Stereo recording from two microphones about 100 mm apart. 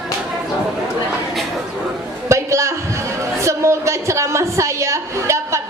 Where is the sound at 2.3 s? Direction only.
30° right (ahead or behind).